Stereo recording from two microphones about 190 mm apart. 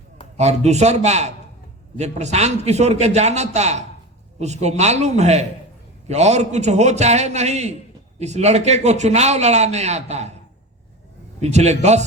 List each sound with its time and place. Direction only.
0.3 s a man's voice: 35° right (ahead or behind)
11.3 s a man's voice: 35° right (ahead or behind)